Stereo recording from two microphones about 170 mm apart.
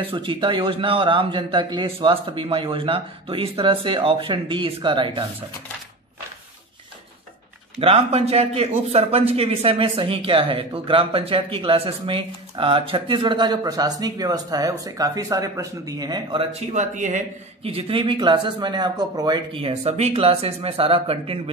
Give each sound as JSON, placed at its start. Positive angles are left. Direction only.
{"t": 0.0, "sound": "a man's voice", "side_deg": -30}
{"t": 7.8, "sound": "a man's voice", "side_deg": -35}
{"t": 17.6, "sound": "a man's voice", "side_deg": -35}